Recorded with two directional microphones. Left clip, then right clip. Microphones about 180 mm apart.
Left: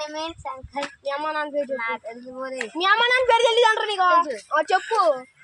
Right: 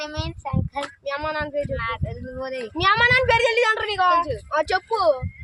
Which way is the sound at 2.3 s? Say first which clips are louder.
Right 2 dB; 30° right (ahead or behind).